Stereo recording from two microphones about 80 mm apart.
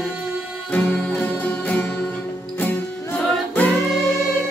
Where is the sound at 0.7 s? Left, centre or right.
Centre.